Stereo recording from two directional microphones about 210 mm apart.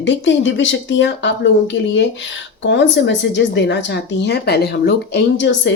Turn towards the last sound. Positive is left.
turn(degrees=60)  # may be behind; listen again after turning